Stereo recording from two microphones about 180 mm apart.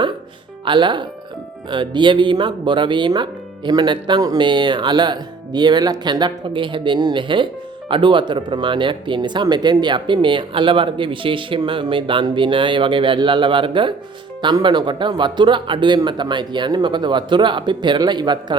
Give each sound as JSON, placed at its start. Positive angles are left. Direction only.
{"t": 0.6, "sound": "speech", "side_deg": -25}